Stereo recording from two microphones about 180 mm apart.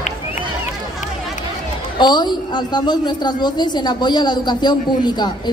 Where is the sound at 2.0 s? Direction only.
25° left (ahead or behind).